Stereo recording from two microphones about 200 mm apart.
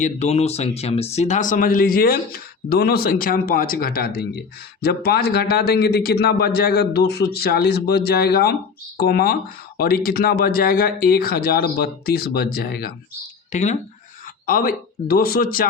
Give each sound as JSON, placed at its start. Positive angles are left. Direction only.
{"t": 0.0, "sound": "speech", "side_deg": 35}
{"t": 13.5, "sound": "speech", "side_deg": 35}
{"t": 14.4, "sound": "speech", "side_deg": 45}